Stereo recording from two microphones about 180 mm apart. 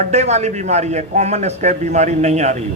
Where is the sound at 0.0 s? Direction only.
40° right (ahead or behind).